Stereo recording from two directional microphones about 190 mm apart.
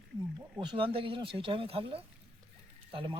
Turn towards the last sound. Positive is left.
turn(degrees=-25)  # may be behind; listen again after turning